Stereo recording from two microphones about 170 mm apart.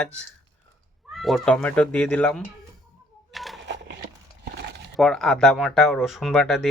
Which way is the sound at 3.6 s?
90° right.